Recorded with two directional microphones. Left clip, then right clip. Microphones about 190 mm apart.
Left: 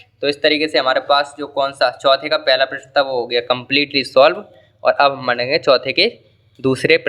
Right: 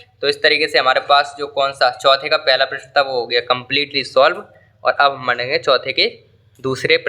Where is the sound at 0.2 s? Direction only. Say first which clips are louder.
Right 1 dB; 20° left (ahead or behind).